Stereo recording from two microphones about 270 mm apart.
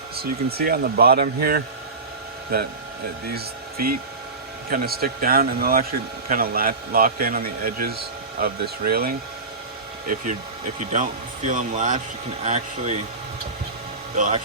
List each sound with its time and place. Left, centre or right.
0.2 s speech: right
4.7 s speech: right
10.9 s a man's voice: right
14.2 s a man's voice: right